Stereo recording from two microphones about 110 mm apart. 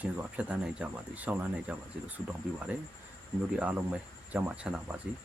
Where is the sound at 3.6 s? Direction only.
15° right (ahead or behind).